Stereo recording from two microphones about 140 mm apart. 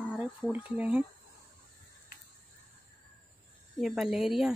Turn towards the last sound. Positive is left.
turn(degrees=-5)  # may be behind; listen again after turning